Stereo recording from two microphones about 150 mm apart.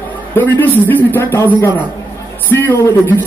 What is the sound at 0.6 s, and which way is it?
Speech, 10° left (ahead or behind).